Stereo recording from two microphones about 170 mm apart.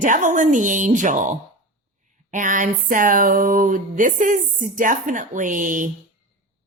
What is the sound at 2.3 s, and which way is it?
A woman's voice, 50° right (ahead or behind).